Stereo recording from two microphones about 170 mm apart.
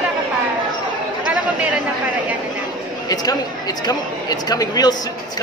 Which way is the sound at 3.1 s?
25° left (ahead or behind).